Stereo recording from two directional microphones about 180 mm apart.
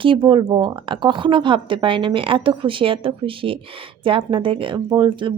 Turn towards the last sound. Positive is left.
turn(degrees=-25)  # may be behind; listen again after turning